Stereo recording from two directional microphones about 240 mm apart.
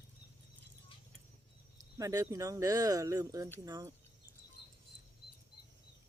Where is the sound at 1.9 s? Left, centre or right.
Centre.